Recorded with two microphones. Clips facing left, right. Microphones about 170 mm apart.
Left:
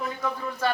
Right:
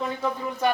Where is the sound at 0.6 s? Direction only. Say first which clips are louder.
Right 3 dB; 20° right (ahead or behind).